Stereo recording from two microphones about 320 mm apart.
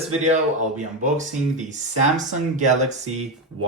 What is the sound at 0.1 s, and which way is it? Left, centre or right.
Speech, right.